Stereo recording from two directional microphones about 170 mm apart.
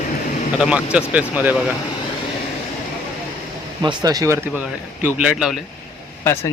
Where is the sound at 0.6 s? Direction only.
5° right (ahead or behind).